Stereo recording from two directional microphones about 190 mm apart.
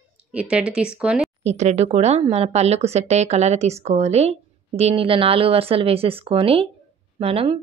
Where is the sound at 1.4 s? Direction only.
35° right (ahead or behind).